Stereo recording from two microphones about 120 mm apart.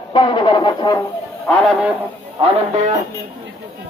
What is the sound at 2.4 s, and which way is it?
Speech, 50° right (ahead or behind).